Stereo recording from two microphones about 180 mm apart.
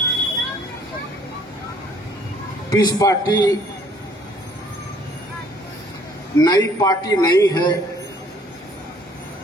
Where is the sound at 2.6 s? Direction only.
20° left (ahead or behind).